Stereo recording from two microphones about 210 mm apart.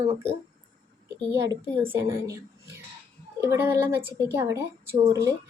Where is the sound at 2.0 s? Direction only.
15° right (ahead or behind).